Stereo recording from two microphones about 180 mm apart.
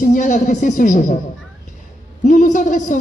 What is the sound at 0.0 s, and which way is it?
Speech, 45° left (ahead or behind).